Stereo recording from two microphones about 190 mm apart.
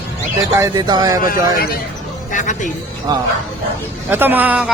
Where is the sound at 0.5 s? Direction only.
15° right (ahead or behind).